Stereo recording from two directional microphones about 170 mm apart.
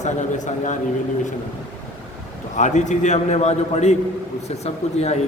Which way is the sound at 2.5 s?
45° left (ahead or behind).